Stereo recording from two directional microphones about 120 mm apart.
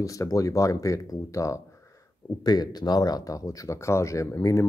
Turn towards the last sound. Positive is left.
turn(degrees=25)  # may be behind; listen again after turning